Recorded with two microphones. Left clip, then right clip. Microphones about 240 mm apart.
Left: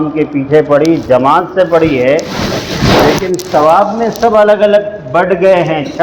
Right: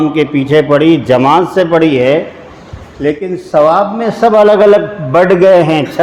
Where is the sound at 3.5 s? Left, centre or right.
Right.